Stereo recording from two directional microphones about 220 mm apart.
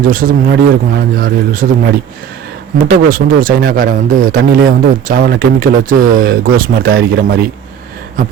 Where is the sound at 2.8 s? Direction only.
40° right (ahead or behind).